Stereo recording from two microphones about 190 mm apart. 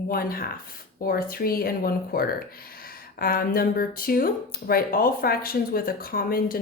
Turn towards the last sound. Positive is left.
turn(degrees=50)  # may be behind; listen again after turning